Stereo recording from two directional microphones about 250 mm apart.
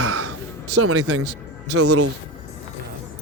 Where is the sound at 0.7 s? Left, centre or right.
Right.